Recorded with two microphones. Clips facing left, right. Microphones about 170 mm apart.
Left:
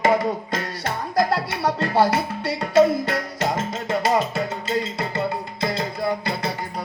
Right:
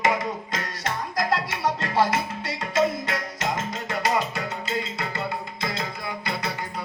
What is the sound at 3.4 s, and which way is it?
Music, 25° left (ahead or behind).